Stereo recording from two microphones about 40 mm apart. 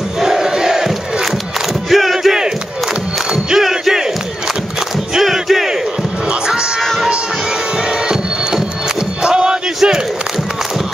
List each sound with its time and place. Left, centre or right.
0.2 s crowd: centre
1.9 s a sound: centre
3.5 s a sound: centre
5.2 s battle cry: centre
6.2 s music: right
6.8 s music: centre
7.7 s music: right
9.2 s chant: centre
9.8 s battle cry: centre